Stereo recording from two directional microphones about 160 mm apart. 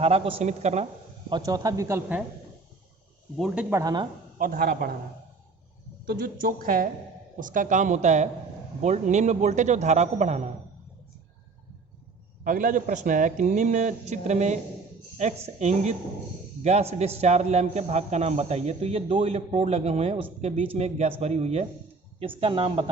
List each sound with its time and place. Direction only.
0.0 s speech: 40° right (ahead or behind)
1.3 s speech: 20° right (ahead or behind)
3.3 s speech: 5° right (ahead or behind)
3.8 s speech: 20° right (ahead or behind)
4.4 s a woman's voice: 60° right (ahead or behind)
6.1 s a woman's voice: 60° right (ahead or behind); by 10.4 s 45° right (ahead or behind)
12.5 s a man's voice: 55° right (ahead or behind); by 22.9 s 35° right (ahead or behind)